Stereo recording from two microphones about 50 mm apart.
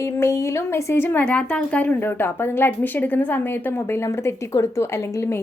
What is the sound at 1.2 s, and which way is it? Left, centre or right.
Speech, left.